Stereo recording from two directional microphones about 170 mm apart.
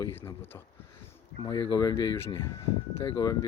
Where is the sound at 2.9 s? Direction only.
30° left (ahead or behind).